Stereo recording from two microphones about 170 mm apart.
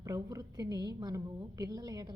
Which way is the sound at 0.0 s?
20° right (ahead or behind).